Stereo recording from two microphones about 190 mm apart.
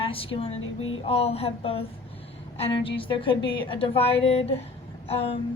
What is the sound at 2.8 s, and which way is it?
A woman's voice, 30° left (ahead or behind).